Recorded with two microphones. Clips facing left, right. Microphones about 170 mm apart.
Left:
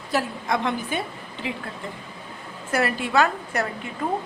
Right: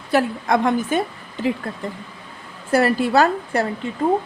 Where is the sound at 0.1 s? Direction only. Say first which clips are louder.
Right 6 dB; 55° right (ahead or behind).